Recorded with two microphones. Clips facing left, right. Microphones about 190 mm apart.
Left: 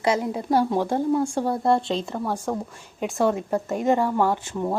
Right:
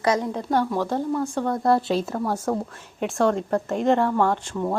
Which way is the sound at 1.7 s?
5° right (ahead or behind).